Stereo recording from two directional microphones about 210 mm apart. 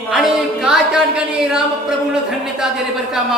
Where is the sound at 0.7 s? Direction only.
5° right (ahead or behind).